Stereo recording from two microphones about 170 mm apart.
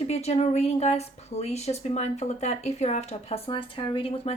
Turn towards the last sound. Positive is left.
turn(degrees=35)  # may be behind; listen again after turning